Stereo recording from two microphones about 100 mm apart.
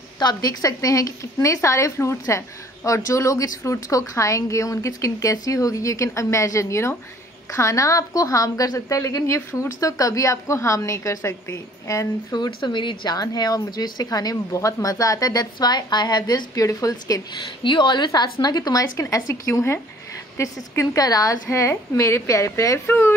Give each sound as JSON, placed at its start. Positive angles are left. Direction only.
{"t": 0.2, "sound": "a woman's voice", "side_deg": 40}
{"t": 17.6, "sound": "a woman's voice", "side_deg": 50}